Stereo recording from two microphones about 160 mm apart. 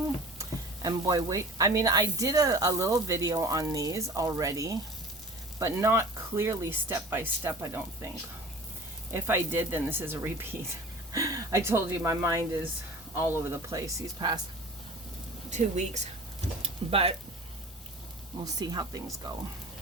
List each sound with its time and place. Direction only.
0.3 s speech: 20° right (ahead or behind)
15.4 s speech: 45° right (ahead or behind)
16.6 s speech: 35° right (ahead or behind)
18.6 s speech: 25° right (ahead or behind)